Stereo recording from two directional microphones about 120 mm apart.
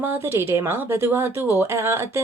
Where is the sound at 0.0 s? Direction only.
20° right (ahead or behind).